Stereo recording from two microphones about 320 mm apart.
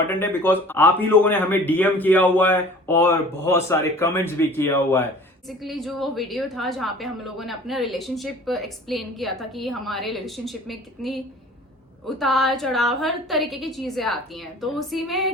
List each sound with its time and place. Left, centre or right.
0.1 s a woman's voice: centre